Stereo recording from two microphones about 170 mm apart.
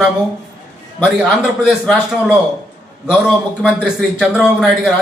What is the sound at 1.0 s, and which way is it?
Speech, 5° right (ahead or behind).